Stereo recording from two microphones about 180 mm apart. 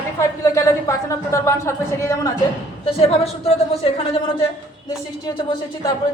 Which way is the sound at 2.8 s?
35° left (ahead or behind).